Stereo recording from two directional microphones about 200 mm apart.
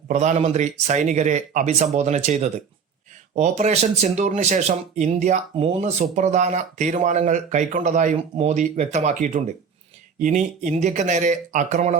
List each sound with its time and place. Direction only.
0.1 s speech: 35° right (ahead or behind)